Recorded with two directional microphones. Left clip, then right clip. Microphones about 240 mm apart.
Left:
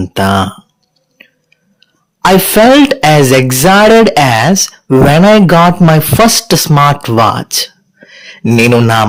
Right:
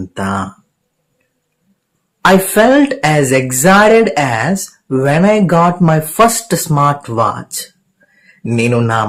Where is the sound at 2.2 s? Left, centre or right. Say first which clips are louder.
Left 3 dB; left.